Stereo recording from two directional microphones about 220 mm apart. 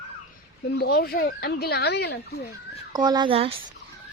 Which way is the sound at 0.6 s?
45° left (ahead or behind).